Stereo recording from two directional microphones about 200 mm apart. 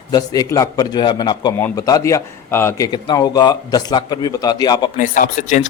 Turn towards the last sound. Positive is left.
turn(degrees=40)  # may be behind; listen again after turning